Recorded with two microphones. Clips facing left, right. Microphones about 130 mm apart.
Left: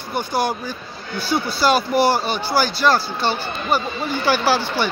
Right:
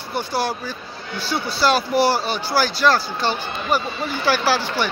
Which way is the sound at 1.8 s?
35° right (ahead or behind).